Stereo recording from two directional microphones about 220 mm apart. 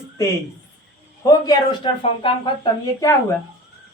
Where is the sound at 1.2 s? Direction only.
15° left (ahead or behind).